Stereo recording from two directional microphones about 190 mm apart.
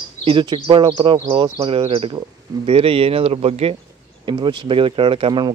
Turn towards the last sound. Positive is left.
turn(degrees=-25)  # may be behind; listen again after turning